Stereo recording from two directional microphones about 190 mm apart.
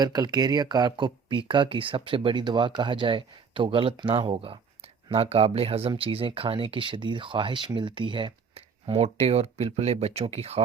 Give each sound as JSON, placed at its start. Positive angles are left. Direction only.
{"t": 0.0, "sound": "speech", "side_deg": -20}